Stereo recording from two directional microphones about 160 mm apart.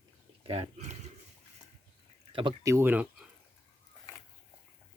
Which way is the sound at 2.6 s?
15° right (ahead or behind).